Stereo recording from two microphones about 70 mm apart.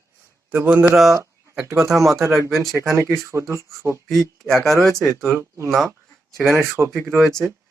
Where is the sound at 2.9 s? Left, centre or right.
Right.